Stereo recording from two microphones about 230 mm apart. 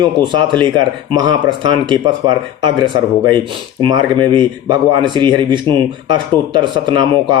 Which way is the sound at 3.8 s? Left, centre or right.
Right.